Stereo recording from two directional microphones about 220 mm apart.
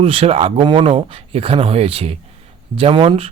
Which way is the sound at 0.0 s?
25° right (ahead or behind).